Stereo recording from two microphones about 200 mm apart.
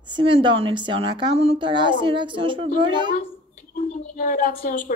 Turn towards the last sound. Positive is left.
turn(degrees=45)  # may be behind; listen again after turning